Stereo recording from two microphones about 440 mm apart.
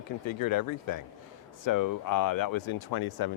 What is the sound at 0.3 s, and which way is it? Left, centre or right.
Speech, left.